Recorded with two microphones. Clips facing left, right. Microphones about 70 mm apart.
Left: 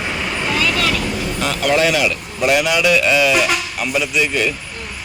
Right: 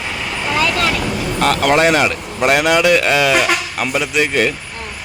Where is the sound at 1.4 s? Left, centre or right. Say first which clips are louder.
Right 7 dB; right.